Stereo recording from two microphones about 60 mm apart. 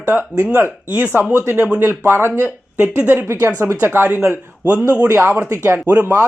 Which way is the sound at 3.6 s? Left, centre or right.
Right.